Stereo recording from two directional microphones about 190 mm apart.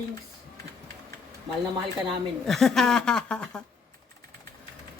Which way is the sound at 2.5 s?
Centre (ahead or behind).